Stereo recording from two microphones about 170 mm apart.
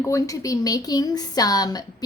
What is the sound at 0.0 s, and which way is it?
A woman's voice, 20° left (ahead or behind).